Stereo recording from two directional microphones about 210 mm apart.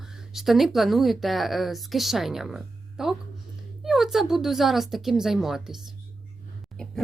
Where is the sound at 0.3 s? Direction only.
Centre (ahead or behind).